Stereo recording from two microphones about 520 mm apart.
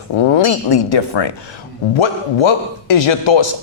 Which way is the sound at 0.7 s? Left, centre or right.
Left.